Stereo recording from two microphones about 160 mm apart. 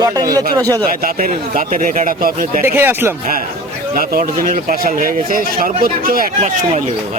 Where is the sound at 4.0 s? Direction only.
65° right (ahead or behind).